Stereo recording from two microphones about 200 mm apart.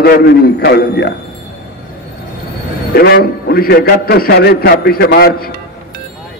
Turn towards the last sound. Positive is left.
turn(degrees=50)  # may be behind; listen again after turning